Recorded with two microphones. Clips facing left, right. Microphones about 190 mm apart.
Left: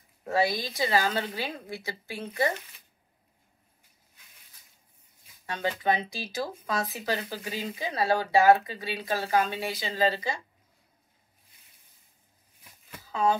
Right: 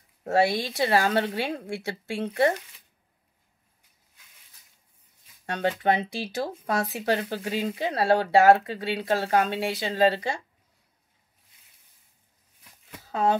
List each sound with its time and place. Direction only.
0.3 s speech: 70° right (ahead or behind)
5.5 s speech: 65° right (ahead or behind)
13.0 s a sound: 70° right (ahead or behind)